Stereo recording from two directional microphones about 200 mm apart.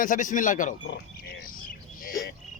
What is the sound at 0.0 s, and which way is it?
Speech, 40° left (ahead or behind).